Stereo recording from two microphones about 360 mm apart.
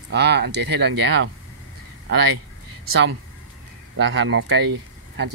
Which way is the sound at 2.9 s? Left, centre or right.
Right.